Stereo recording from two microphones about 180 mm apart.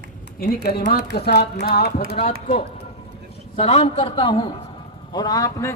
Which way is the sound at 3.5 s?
35° left (ahead or behind).